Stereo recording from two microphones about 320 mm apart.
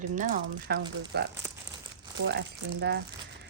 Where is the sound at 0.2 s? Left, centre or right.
Right.